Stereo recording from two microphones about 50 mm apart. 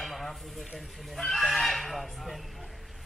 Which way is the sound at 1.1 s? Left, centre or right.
Centre.